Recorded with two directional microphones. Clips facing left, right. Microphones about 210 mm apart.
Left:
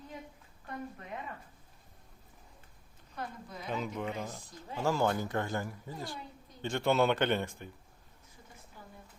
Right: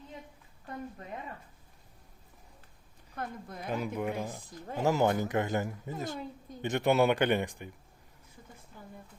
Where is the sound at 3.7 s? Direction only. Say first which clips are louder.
Right 3 dB; 10° right (ahead or behind).